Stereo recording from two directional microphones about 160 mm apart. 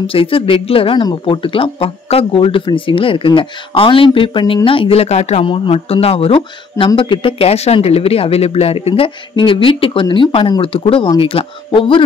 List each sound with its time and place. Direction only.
0.0 s speech: 35° left (ahead or behind)